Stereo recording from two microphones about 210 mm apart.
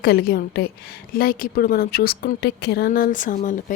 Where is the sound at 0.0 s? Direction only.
45° left (ahead or behind).